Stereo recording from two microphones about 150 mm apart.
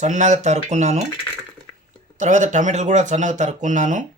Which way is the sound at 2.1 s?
55° right (ahead or behind).